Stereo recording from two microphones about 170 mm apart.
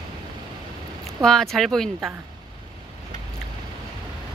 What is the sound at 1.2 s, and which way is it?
Speech, centre (ahead or behind).